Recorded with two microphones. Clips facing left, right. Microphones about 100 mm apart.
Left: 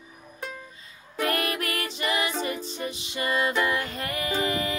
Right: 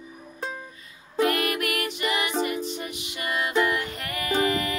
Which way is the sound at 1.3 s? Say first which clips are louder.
Right 2 dB; 30° left (ahead or behind).